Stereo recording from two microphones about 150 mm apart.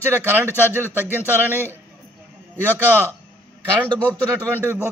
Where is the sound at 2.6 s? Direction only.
15° right (ahead or behind).